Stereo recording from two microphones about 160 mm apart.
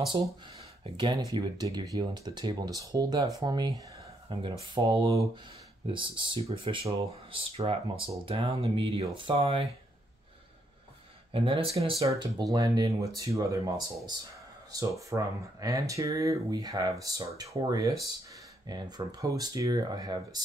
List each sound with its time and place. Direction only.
0.8 s speech: 25° right (ahead or behind)
11.3 s speech: 35° right (ahead or behind)